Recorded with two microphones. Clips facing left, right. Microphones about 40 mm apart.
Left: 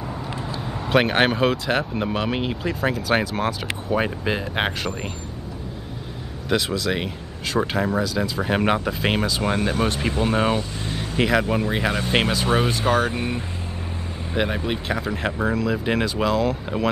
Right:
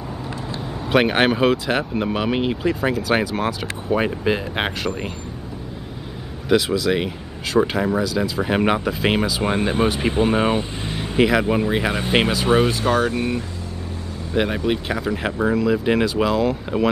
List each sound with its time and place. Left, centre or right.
0.8 s speech: centre
6.5 s speech: centre
9.4 s speech: centre
13.1 s speech: centre
14.3 s speech: centre